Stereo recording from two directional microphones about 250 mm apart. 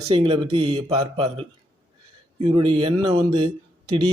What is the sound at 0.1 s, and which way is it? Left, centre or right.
A man's voice, right.